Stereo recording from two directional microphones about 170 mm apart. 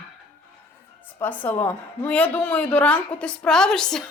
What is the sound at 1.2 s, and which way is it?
A woman's voice, 10° left (ahead or behind).